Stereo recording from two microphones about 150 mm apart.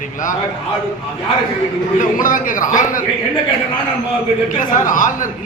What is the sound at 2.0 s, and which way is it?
A man's voice, 60° left (ahead or behind).